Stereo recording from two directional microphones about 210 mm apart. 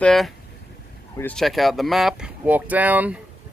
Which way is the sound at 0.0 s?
Centre (ahead or behind).